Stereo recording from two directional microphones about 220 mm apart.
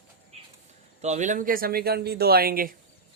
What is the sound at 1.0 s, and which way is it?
Speech, 30° right (ahead or behind).